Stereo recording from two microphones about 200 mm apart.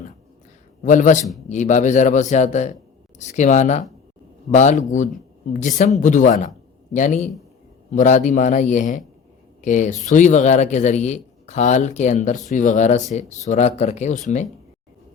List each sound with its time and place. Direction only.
0.8 s speech: 40° left (ahead or behind)